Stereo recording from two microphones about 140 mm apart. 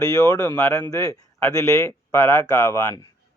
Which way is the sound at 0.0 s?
25° left (ahead or behind).